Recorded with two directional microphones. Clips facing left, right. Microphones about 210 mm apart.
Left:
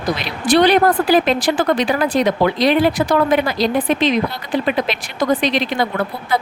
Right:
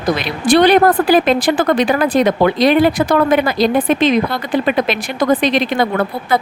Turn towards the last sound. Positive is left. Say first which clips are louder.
# right 4 dB
turn(degrees=-55)  # may be behind; listen again after turning